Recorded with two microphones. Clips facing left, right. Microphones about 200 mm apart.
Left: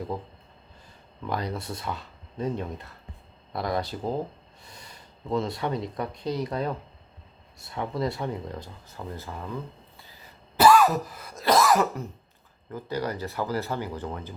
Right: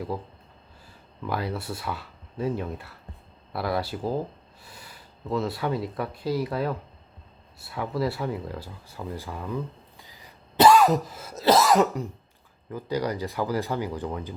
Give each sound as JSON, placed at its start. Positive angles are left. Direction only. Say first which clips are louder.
{"t": 1.3, "sound": "speech", "louder": "right 1 dB", "side_deg": -5}
{"t": 10.0, "sound": "throat clearing", "louder": "right 1 dB", "side_deg": -15}
{"t": 11.3, "sound": "cough", "louder": "right 2 dB", "side_deg": -25}
{"t": 12.7, "sound": "speech", "louder": "right 2 dB", "side_deg": -15}